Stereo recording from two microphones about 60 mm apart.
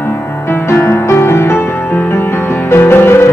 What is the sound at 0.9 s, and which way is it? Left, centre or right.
Music, left.